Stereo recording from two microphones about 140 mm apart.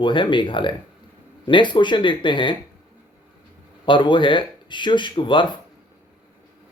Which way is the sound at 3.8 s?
35° left (ahead or behind).